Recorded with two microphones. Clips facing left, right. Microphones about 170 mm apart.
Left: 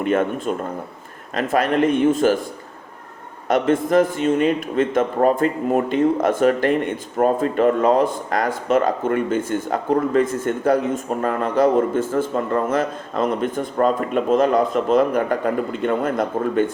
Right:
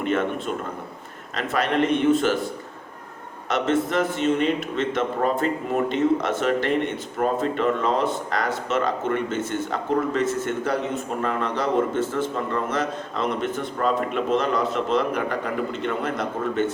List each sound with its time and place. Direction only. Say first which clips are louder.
0.0 s speech: left 4 dB; 50° left (ahead or behind)
1.5 s a man's voice: left 4 dB; 50° left (ahead or behind)
3.5 s a man's voice: left 5 dB; 50° left (ahead or behind)